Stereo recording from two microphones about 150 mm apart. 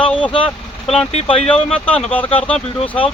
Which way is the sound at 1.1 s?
45° left (ahead or behind).